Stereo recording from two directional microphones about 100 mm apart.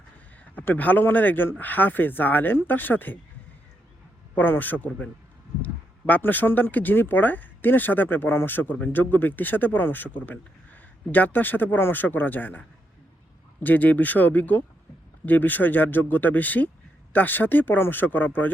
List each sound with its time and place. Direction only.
0.5 s speech: 15° left (ahead or behind)
4.4 s speech: 20° left (ahead or behind)